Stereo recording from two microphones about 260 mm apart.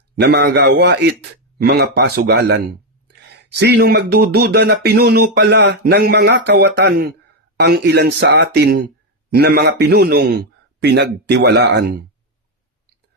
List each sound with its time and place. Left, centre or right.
0.2 s speech: right